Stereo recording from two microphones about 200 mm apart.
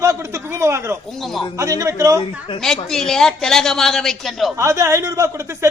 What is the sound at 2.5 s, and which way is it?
Speech, 5° left (ahead or behind).